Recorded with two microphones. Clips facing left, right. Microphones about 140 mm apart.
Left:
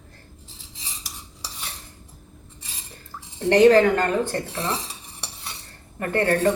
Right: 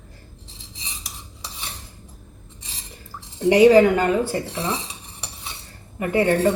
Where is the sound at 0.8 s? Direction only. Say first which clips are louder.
Right 1 dB; centre (ahead or behind).